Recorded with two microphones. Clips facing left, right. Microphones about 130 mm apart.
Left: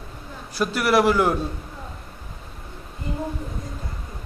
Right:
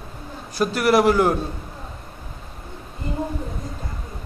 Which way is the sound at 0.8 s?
45° right (ahead or behind).